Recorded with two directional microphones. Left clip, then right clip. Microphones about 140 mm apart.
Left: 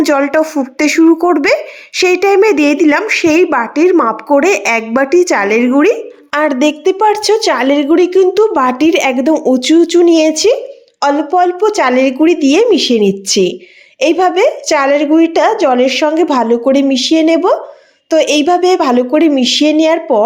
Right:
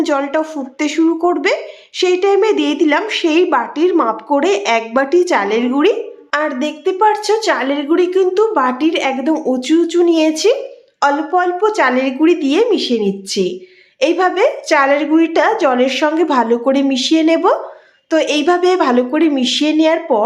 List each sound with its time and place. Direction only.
0.0 s a woman's voice: 45° left (ahead or behind)
6.3 s a woman's voice: 70° left (ahead or behind); by 8.4 s 35° left (ahead or behind)
8.5 s a woman's voice: 50° left (ahead or behind)
9.3 s a woman's voice: 35° left (ahead or behind)
14.0 s a woman's voice: 30° left (ahead or behind)